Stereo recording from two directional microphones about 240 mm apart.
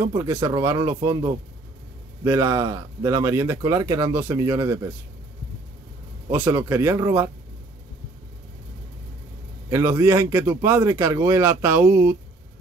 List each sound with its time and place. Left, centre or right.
0.0 s a man's voice: centre
6.3 s a man's voice: centre
9.7 s a man's voice: centre